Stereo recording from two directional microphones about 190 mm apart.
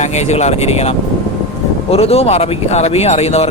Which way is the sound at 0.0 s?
35° left (ahead or behind).